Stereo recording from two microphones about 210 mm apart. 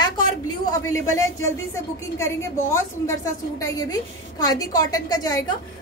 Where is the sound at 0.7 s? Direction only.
15° left (ahead or behind).